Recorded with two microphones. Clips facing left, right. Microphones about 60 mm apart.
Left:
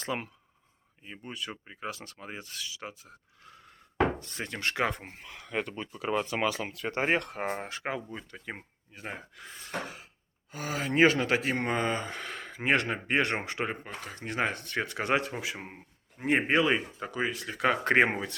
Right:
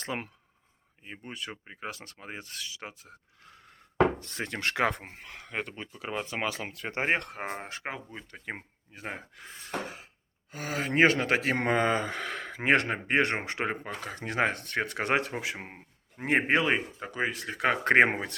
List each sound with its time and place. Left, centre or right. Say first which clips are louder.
0.0 s speech: left 1 dB; right
4.2 s speech: right 2 dB; right
5.4 s speech: left 2 dB; right
6.4 s speech: left 3 dB; right
7.3 s speech: left 3 dB; centre
8.3 s speech: right 2 dB; right
9.3 s speech: left 1 dB; right
10.5 s speech: even; right
11.4 s speech: right 3 dB; right
12.7 s speech: right 2 dB; right
13.4 s speech: right 1 dB; right
13.7 s speech: right 3 dB; right
16.1 s speech: even; right
17.1 s speech: right 1 dB; right